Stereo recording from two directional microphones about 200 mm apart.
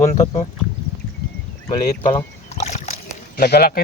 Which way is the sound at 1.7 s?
30° left (ahead or behind).